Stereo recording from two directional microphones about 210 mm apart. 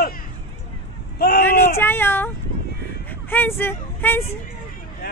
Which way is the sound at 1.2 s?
45° left (ahead or behind).